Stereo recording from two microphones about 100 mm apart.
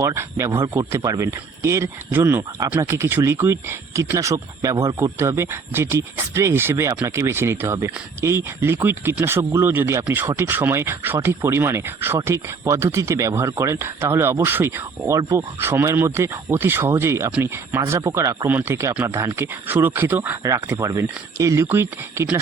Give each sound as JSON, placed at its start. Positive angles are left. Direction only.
{"t": 0.0, "sound": "speech", "side_deg": -30}
{"t": 18.4, "sound": "speech", "side_deg": -20}
{"t": 20.4, "sound": "speech", "side_deg": -30}